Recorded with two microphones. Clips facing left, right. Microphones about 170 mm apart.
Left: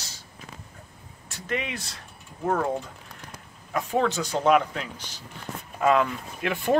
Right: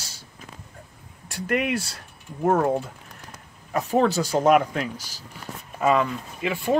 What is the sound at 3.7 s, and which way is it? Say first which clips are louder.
Speech: right 4 dB; 35° right (ahead or behind).